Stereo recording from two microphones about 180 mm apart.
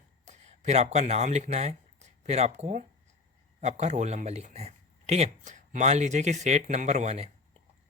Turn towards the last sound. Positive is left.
turn(degrees=-40)  # may be behind; listen again after turning